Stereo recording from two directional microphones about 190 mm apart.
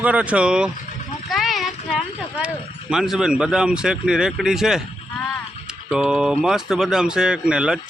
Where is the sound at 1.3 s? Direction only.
Centre (ahead or behind).